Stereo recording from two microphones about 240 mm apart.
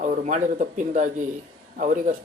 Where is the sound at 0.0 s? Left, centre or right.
Right.